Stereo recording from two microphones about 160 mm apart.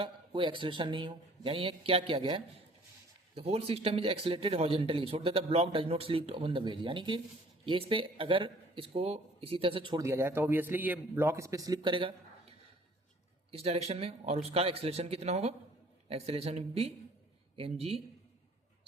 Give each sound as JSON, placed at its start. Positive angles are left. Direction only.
{"t": 0.0, "sound": "speech", "side_deg": -30}
{"t": 10.0, "sound": "a man's voice", "side_deg": -15}